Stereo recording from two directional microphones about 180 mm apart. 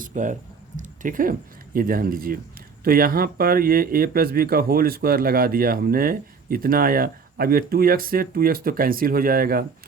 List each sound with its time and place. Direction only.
0.0 s speech: 45° right (ahead or behind)